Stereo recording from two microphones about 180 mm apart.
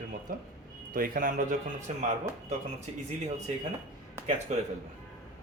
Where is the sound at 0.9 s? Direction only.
50° right (ahead or behind).